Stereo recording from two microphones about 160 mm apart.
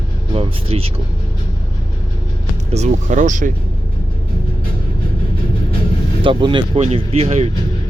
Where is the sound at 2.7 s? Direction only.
45° right (ahead or behind).